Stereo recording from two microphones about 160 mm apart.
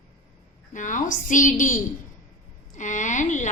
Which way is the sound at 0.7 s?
50° left (ahead or behind).